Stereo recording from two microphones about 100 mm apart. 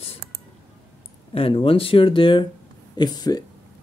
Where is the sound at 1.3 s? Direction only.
70° left (ahead or behind).